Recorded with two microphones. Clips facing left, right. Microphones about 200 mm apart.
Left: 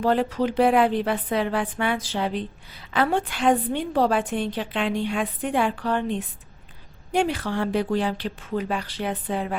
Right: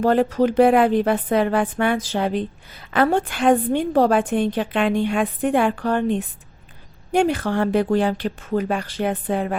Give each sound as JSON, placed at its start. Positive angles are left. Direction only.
{"t": 0.0, "sound": "a woman's voice", "side_deg": -45}